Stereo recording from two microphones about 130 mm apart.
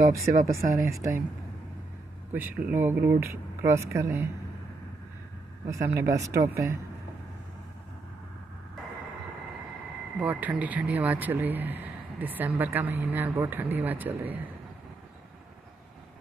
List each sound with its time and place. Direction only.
0.5 s speech: 25° right (ahead or behind)
2.3 s speech: 15° right (ahead or behind)
5.7 s speech: 20° right (ahead or behind)
10.1 s speech: 10° right (ahead or behind)